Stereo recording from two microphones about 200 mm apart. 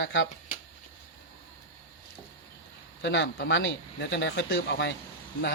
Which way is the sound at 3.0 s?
65° left (ahead or behind).